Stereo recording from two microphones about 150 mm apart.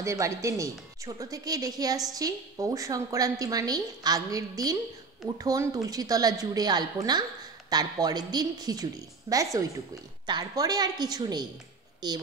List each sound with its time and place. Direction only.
0.0 s a woman's voice: 20° right (ahead or behind)